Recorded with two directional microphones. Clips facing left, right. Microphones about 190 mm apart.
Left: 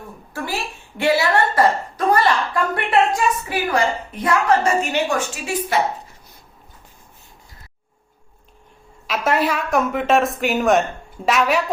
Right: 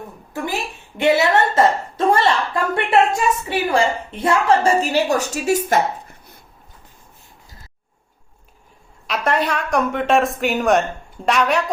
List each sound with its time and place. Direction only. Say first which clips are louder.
0.3 s a woman's voice: right 2 dB; 20° right (ahead or behind); by 6.3 s 50° right (ahead or behind)
9.0 s a woman's voice: left 1 dB; centre (ahead or behind)